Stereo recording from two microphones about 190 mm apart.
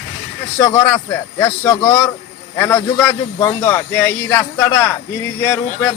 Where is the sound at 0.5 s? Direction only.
10° left (ahead or behind).